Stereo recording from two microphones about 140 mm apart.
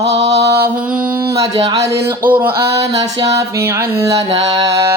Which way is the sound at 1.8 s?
20° right (ahead or behind).